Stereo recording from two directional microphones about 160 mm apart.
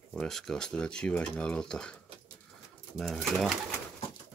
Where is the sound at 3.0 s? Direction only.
Centre (ahead or behind).